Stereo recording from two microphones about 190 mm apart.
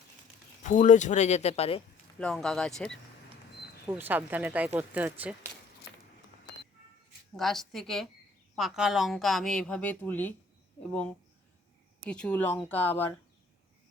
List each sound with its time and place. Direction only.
0.6 s speech: 40° left (ahead or behind)
2.1 s a woman's voice: 5° left (ahead or behind)
3.8 s speech: 10° right (ahead or behind)
7.3 s a woman's voice: centre (ahead or behind)
12.0 s speech: 5° left (ahead or behind)